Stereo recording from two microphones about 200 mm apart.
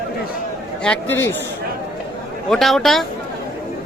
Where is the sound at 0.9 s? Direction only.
10° left (ahead or behind).